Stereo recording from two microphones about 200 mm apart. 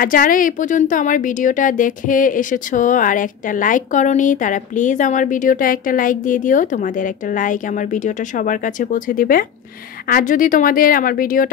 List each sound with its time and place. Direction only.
0.0 s a woman's voice: 45° left (ahead or behind)